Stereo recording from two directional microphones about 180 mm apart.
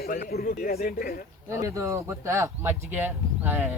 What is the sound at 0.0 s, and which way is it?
A woman's voice, 60° left (ahead or behind).